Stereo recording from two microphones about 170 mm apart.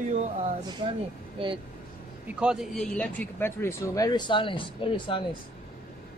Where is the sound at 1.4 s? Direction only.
35° right (ahead or behind).